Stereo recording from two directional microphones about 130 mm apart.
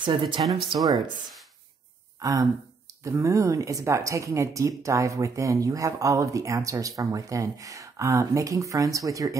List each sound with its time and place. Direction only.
0.0 s speech: 40° right (ahead or behind)
0.7 s speech: 30° right (ahead or behind)
2.1 s a sound: 25° right (ahead or behind)
3.0 s speech: 25° right (ahead or behind)